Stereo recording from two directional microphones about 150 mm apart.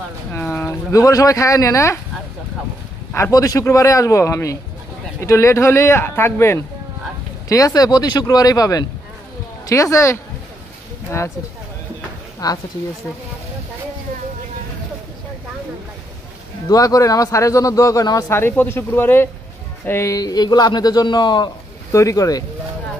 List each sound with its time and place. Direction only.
0.3 s speech: 15° left (ahead or behind)
3.1 s a man's voice: 20° left (ahead or behind)
12.4 s a man's voice: 25° left (ahead or behind)
16.6 s a man's voice: 25° left (ahead or behind)